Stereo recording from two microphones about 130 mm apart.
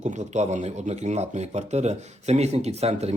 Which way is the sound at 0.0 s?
65° right (ahead or behind).